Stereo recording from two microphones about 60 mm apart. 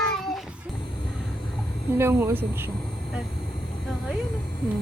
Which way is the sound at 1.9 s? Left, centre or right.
Right.